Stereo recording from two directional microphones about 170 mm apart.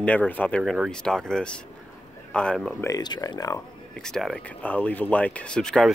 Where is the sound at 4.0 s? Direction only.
5° left (ahead or behind).